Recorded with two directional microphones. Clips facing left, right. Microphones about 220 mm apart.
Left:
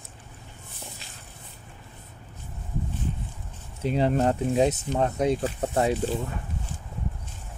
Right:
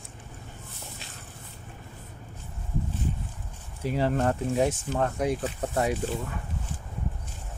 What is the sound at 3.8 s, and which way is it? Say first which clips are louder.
Speech: left 3 dB; 20° left (ahead or behind).